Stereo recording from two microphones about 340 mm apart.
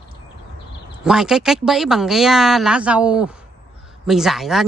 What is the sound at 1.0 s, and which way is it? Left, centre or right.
Speech, centre.